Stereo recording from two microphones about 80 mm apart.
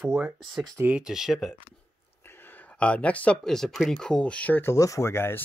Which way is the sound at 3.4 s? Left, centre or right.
Centre.